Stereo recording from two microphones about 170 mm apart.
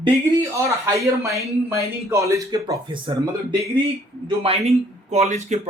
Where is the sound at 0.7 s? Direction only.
20° right (ahead or behind).